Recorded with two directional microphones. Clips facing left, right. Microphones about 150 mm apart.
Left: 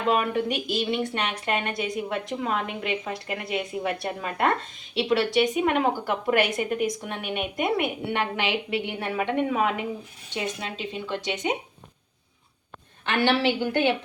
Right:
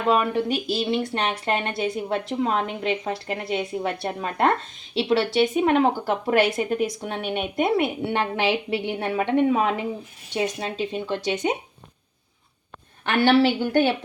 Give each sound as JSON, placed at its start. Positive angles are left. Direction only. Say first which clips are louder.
{"t": 0.1, "sound": "speech", "louder": "right 3 dB", "side_deg": -35}
{"t": 13.1, "sound": "speech", "louder": "right 4 dB", "side_deg": -45}